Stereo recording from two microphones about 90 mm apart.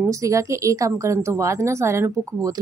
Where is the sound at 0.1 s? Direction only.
35° right (ahead or behind).